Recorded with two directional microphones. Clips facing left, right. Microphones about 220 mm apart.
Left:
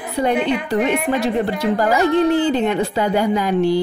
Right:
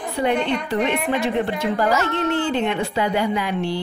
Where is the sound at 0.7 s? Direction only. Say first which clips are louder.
Left 3 dB; 45° left (ahead or behind).